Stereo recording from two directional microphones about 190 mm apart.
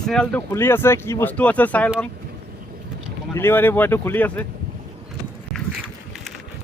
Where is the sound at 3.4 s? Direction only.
10° left (ahead or behind).